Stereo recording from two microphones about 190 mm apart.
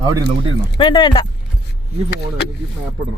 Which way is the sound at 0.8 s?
25° left (ahead or behind).